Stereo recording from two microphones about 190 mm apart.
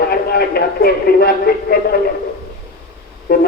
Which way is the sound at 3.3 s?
55° left (ahead or behind).